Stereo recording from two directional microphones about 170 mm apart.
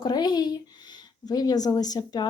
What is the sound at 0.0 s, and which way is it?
Speech, 25° left (ahead or behind).